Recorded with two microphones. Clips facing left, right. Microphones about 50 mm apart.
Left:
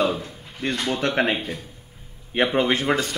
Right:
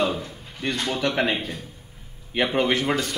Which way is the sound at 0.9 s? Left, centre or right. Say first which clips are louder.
Left 1 dB; left.